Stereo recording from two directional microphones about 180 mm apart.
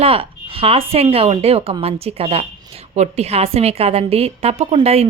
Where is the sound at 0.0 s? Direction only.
30° right (ahead or behind).